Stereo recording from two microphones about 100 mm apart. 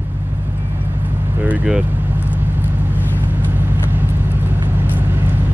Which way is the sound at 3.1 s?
20° right (ahead or behind).